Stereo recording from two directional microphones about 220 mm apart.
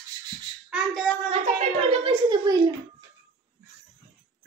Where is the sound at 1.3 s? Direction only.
30° right (ahead or behind).